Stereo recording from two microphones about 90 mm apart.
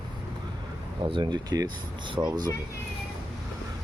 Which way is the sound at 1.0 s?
60° right (ahead or behind).